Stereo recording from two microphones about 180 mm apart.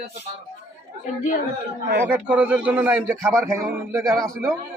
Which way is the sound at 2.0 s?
10° right (ahead or behind).